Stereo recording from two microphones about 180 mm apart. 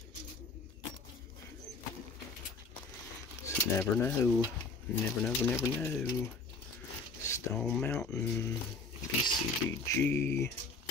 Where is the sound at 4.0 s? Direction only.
10° left (ahead or behind).